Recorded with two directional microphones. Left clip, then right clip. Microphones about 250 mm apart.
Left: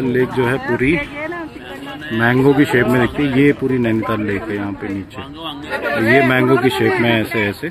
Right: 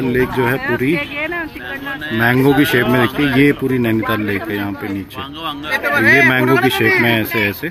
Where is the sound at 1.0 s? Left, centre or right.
Right.